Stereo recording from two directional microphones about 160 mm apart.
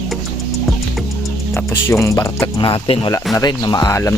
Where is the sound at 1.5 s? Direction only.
15° left (ahead or behind).